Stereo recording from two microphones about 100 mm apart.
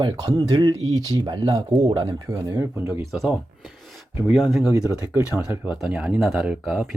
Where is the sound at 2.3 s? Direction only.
30° right (ahead or behind).